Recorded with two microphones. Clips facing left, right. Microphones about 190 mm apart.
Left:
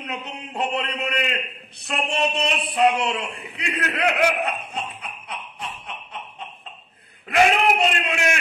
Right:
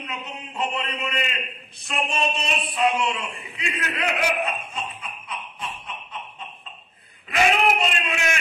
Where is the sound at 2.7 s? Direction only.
65° left (ahead or behind).